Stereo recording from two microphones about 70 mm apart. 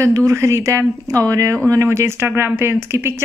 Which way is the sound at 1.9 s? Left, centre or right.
Right.